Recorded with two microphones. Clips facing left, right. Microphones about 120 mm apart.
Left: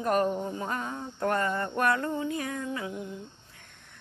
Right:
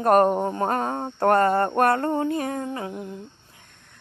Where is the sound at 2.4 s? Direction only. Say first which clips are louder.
Right 5 dB; 40° right (ahead or behind).